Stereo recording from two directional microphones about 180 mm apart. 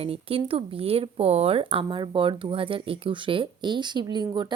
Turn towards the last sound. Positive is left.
turn(degrees=-25)  # may be behind; listen again after turning